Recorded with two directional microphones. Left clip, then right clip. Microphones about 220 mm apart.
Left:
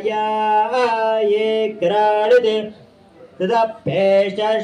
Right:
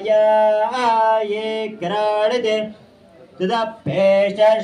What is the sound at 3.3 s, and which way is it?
Speech, 10° right (ahead or behind).